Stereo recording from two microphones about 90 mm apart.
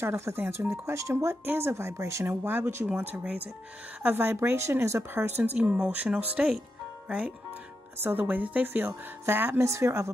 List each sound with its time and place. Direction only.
0.0 s speech: 30° right (ahead or behind)